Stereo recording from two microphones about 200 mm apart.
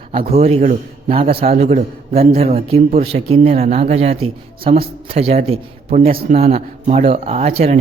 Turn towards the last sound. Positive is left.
turn(degrees=-30)  # may be behind; listen again after turning